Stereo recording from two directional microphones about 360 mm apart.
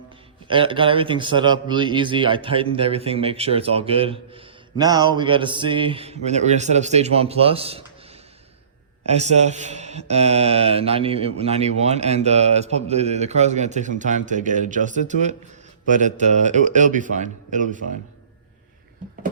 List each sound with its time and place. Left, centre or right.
0.4 s a man's voice: centre
9.0 s a man's voice: centre